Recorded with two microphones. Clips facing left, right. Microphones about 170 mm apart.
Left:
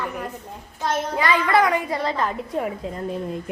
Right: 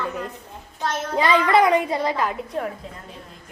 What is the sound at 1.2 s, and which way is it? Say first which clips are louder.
Speech: right 3 dB; 20° right (ahead or behind).